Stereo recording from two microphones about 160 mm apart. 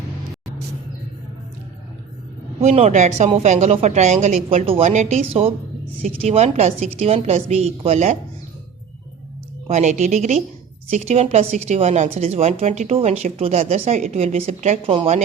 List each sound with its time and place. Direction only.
2.6 s speech: 40° right (ahead or behind)
9.6 s speech: 45° right (ahead or behind)